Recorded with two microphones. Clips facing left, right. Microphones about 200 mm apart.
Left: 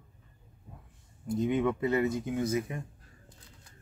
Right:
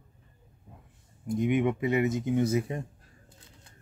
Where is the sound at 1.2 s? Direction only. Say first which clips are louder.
Right 2 dB; 20° right (ahead or behind).